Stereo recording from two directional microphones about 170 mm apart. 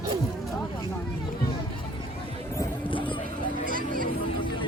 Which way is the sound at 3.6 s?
55° right (ahead or behind).